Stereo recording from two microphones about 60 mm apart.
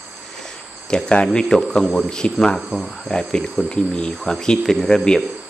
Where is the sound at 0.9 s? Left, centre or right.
Centre.